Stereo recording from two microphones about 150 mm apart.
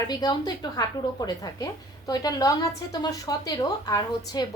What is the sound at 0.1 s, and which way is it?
A woman's voice, 25° left (ahead or behind).